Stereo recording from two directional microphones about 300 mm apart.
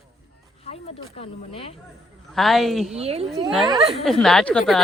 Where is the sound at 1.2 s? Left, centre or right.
Centre.